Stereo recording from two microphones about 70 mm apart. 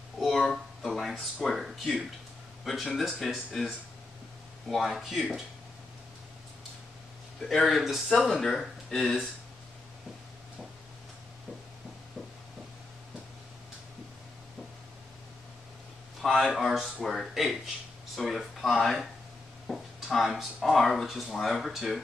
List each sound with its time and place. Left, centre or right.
0.4 s speech: centre
7.6 s speech: centre
16.2 s a sound: centre
16.4 s speech: centre
19.7 s a sound: centre
20.2 s speech: centre